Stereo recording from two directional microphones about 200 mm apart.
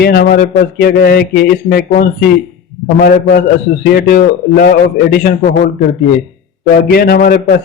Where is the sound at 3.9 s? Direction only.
45° left (ahead or behind).